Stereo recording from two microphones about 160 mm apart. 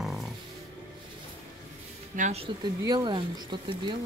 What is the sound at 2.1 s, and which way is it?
Speech, 50° right (ahead or behind).